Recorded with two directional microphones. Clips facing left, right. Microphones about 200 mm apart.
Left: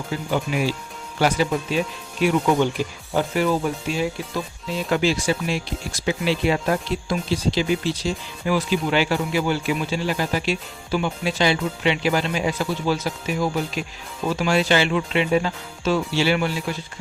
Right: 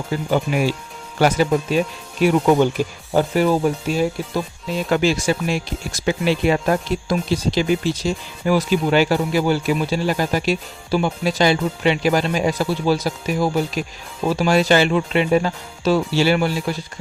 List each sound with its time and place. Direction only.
1.2 s speech: 50° right (ahead or behind)